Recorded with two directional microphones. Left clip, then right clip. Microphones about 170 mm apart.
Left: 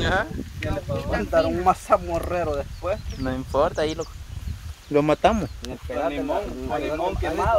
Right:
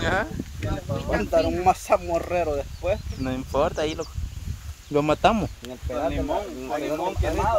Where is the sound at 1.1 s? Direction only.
65° right (ahead or behind).